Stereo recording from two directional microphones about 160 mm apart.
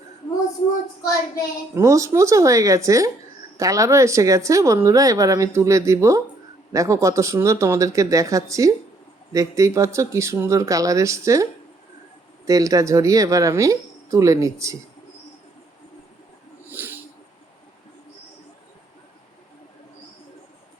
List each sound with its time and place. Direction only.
1.7 s speech: 20° right (ahead or behind)
12.5 s speech: 20° right (ahead or behind)
16.6 s a sound: 15° right (ahead or behind)